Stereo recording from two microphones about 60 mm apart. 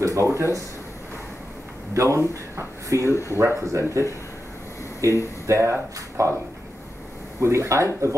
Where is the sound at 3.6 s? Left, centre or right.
Right.